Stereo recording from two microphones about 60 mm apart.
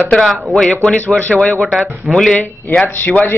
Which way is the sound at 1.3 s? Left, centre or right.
Left.